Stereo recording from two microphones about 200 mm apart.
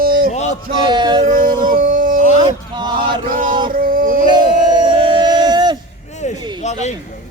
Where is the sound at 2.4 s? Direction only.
20° right (ahead or behind).